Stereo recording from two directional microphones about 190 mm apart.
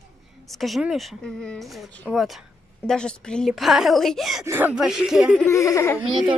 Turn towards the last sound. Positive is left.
turn(degrees=-25)  # may be behind; listen again after turning